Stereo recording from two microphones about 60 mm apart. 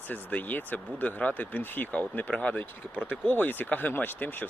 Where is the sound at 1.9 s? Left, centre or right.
Left.